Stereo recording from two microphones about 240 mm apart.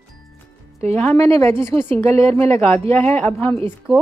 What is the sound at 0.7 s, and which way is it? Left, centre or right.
Speech, right.